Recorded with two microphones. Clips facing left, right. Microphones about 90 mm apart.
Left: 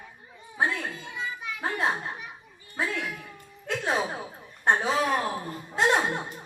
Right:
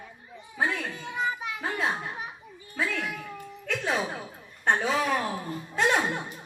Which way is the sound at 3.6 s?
25° left (ahead or behind).